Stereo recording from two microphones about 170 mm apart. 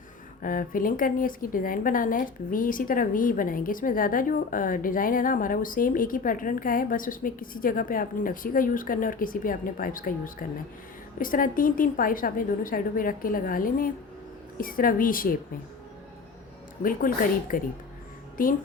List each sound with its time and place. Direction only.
0.4 s a woman's voice: 55° left (ahead or behind)
17.5 s a woman's voice: 55° left (ahead or behind)